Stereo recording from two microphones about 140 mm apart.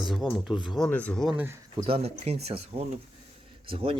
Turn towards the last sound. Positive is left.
turn(degrees=-40)  # may be behind; listen again after turning